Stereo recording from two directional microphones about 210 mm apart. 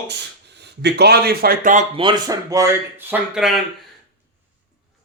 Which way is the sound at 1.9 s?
25° right (ahead or behind).